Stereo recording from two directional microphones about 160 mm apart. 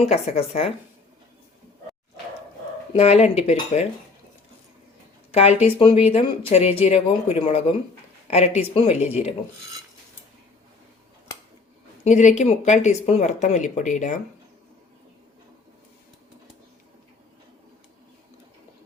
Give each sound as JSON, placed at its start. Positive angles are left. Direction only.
{"t": 0.1, "sound": "speech", "side_deg": 40}
{"t": 2.9, "sound": "speech", "side_deg": 40}
{"t": 5.3, "sound": "speech", "side_deg": 40}
{"t": 12.0, "sound": "speech", "side_deg": 50}